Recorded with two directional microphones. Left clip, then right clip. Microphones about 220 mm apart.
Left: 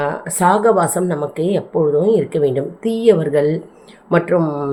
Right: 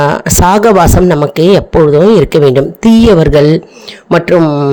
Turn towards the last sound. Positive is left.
turn(degrees=-40)  # may be behind; listen again after turning